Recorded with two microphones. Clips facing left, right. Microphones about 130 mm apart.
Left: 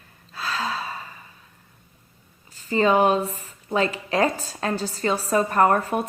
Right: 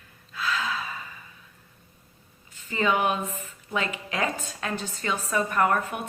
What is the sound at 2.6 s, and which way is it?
A woman's voice, 35° left (ahead or behind).